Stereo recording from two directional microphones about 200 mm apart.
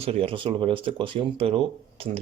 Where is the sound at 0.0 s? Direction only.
30° right (ahead or behind).